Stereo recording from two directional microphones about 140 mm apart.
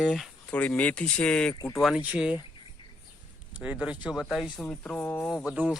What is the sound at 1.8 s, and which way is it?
Speech, 5° right (ahead or behind).